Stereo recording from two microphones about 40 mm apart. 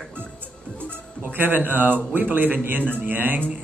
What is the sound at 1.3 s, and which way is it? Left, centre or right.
Speech, right.